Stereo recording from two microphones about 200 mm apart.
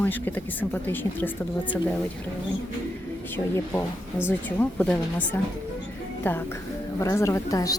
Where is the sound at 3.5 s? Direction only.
10° left (ahead or behind).